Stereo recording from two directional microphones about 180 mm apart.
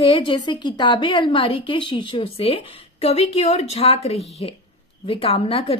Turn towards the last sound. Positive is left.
turn(degrees=30)  # may be behind; listen again after turning